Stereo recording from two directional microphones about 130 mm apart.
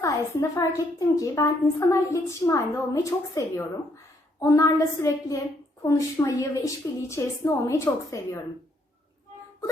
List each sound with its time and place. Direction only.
0.0 s a woman's voice: 25° left (ahead or behind)